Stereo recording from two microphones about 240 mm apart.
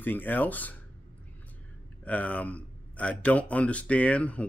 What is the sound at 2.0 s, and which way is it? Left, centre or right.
A man's voice, centre.